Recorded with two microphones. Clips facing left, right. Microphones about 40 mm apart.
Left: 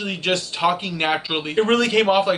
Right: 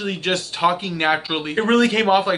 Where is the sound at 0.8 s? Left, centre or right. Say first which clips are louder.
Right 2 dB; centre.